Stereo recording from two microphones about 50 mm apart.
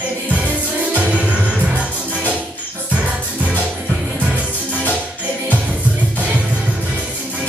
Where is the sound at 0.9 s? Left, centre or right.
Right.